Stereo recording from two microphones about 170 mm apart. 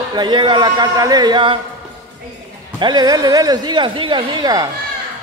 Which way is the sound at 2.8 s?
25° right (ahead or behind).